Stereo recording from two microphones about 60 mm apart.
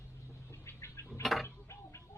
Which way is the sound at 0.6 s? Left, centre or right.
Left.